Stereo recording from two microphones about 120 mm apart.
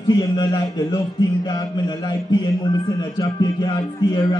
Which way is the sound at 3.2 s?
30° left (ahead or behind).